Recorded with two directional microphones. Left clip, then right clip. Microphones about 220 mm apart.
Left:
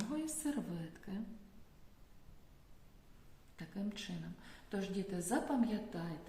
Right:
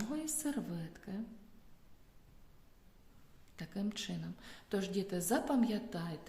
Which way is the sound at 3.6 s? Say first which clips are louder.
Right 4 dB; 45° right (ahead or behind).